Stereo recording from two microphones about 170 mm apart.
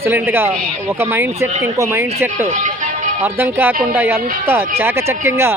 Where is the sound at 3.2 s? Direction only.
15° right (ahead or behind).